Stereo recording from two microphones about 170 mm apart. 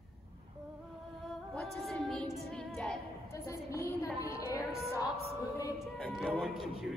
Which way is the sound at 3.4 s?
20° left (ahead or behind).